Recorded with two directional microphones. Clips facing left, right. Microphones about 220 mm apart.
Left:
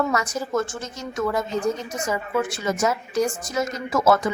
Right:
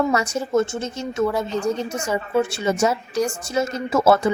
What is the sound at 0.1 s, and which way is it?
A woman's voice, 30° right (ahead or behind).